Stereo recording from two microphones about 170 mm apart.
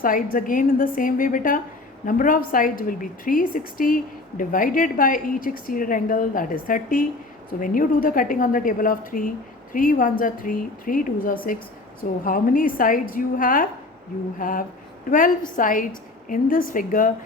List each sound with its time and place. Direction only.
0.0 s a woman's voice: 55° left (ahead or behind)